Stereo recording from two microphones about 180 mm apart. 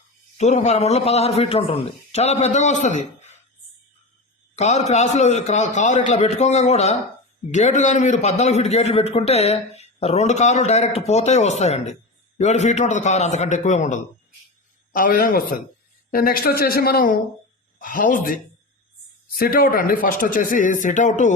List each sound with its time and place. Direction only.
0.3 s a man's voice: 40° left (ahead or behind)
4.5 s a man's voice: 40° left (ahead or behind)
19.4 s speech: 55° left (ahead or behind)